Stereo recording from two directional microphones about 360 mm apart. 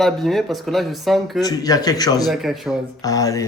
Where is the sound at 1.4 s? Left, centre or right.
Centre.